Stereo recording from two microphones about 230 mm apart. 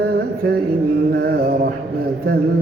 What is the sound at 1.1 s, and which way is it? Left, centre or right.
Mantra, right.